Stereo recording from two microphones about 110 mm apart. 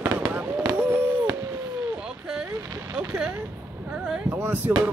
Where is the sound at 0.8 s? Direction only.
20° right (ahead or behind).